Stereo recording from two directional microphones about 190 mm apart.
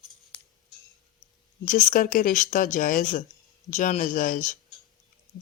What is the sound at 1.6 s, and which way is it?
Speech, 45° left (ahead or behind).